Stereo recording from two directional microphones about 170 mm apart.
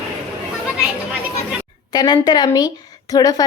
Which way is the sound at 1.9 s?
25° left (ahead or behind).